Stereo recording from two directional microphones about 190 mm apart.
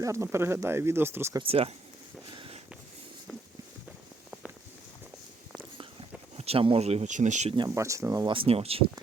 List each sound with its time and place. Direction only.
0.0 s speech: 15° right (ahead or behind)
1.4 s speech: 30° right (ahead or behind)
2.3 s walk: 25° right (ahead or behind)
6.3 s speech: 30° right (ahead or behind)
7.5 s speech: 20° right (ahead or behind)